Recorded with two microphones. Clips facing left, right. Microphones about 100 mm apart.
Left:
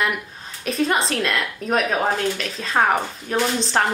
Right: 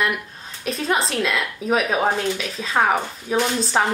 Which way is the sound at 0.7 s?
Centre (ahead or behind).